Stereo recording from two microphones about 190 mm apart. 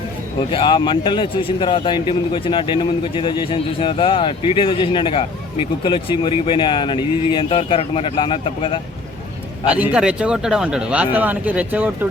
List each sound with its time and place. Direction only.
0.3 s a man's voice: 25° left (ahead or behind)
9.6 s speech: 5° right (ahead or behind)